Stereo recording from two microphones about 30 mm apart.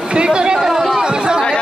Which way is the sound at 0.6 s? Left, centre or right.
Centre.